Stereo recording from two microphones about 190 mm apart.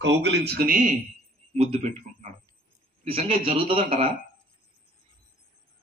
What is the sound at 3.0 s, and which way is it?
Speech, 30° right (ahead or behind).